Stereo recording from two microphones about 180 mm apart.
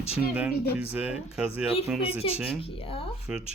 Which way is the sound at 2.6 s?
30° left (ahead or behind).